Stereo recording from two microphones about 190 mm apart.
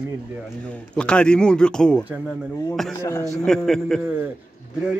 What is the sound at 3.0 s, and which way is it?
Speech, 15° left (ahead or behind).